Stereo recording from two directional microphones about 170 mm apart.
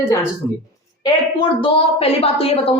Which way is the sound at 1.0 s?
30° left (ahead or behind).